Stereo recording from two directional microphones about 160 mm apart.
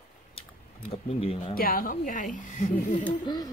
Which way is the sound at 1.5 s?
65° left (ahead or behind).